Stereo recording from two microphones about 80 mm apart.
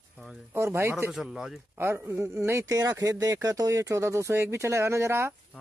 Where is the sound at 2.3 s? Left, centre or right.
Right.